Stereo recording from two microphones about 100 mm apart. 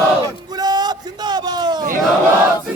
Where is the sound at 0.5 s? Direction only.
40° right (ahead or behind).